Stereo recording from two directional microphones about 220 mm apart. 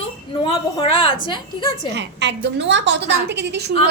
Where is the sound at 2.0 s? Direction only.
50° right (ahead or behind).